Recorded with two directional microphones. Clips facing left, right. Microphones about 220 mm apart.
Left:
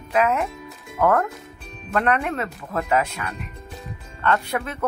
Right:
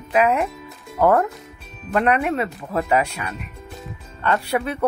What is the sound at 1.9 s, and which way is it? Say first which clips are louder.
Speech: right 3 dB; 15° right (ahead or behind).